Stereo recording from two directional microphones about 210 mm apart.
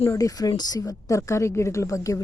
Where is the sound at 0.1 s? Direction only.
15° left (ahead or behind).